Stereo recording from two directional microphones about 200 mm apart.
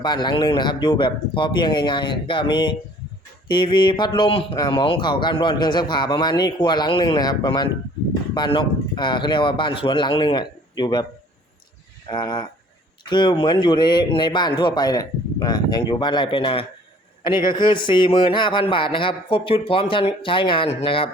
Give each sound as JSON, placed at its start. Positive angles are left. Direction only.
{"t": 0.0, "sound": "a man's voice", "side_deg": 20}
{"t": 12.0, "sound": "a man's voice", "side_deg": 20}